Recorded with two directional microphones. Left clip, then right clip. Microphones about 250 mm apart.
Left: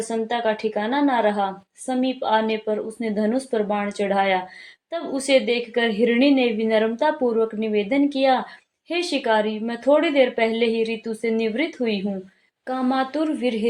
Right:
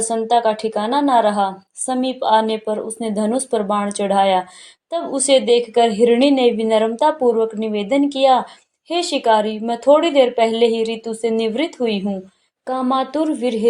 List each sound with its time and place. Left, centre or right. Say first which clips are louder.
0.1 s a woman's voice: right 7 dB; right